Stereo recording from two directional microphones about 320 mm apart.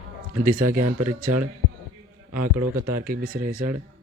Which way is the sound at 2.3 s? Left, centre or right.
Right.